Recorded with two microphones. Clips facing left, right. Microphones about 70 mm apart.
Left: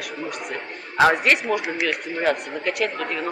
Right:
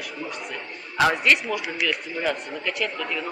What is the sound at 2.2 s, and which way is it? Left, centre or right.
Speech, left.